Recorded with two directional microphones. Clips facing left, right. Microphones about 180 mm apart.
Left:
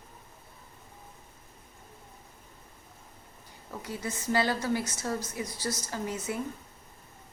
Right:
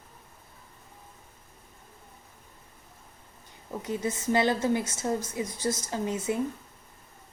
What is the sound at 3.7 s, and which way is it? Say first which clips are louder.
A woman's voice: right 6 dB; 20° right (ahead or behind).